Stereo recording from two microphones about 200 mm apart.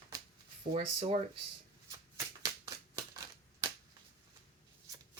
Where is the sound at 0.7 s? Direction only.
25° right (ahead or behind).